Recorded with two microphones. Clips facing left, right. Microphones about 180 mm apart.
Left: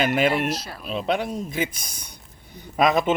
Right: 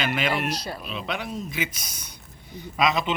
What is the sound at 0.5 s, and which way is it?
Speech, centre (ahead or behind).